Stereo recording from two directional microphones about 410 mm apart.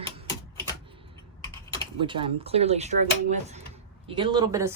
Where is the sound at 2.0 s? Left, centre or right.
Centre.